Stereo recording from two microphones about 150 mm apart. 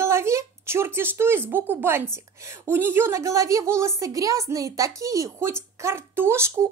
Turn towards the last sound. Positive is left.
turn(degrees=-15)  # may be behind; listen again after turning